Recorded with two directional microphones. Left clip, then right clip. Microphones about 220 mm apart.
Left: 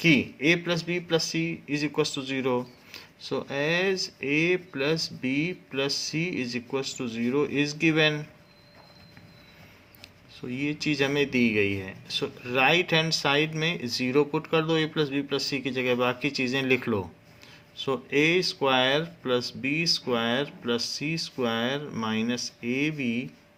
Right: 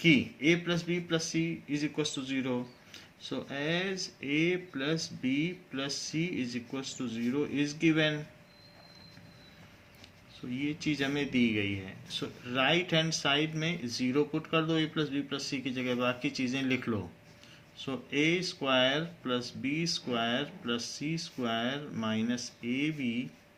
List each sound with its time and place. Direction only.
0.0 s speech: 40° left (ahead or behind)
10.6 s speech: 45° left (ahead or behind)